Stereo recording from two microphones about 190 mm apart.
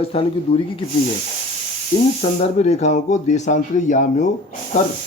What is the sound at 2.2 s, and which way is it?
Speech, 35° left (ahead or behind).